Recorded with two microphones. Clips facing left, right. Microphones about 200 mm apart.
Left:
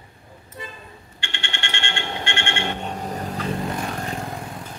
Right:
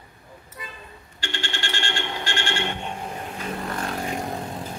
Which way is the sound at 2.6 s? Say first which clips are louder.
Left 2 dB; 40° left (ahead or behind).